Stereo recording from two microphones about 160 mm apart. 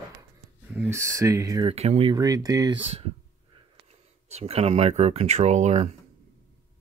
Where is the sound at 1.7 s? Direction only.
40° right (ahead or behind).